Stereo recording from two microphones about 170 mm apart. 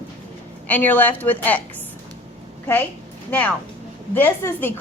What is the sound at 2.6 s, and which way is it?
Speech, 10° left (ahead or behind).